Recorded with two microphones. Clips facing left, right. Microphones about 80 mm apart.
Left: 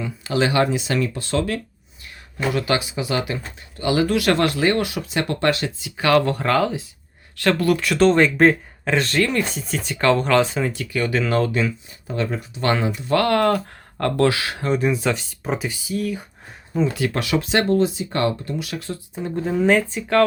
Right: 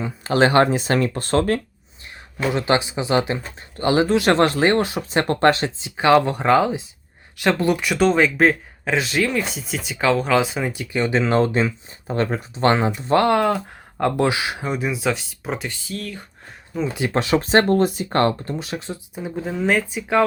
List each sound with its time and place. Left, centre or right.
0.0 s speech: right
2.0 s speech: right
8.0 s speech: centre
16.9 s speech: right
19.2 s speech: centre